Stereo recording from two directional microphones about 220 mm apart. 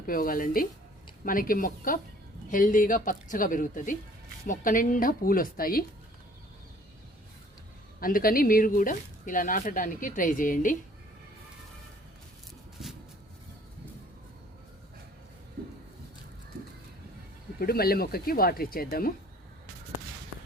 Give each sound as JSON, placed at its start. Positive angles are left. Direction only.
{"t": 0.0, "sound": "speech", "side_deg": 40}
{"t": 8.0, "sound": "speech", "side_deg": 40}
{"t": 17.6, "sound": "speech", "side_deg": 45}